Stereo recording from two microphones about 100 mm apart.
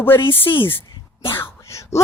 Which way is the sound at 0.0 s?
25° left (ahead or behind).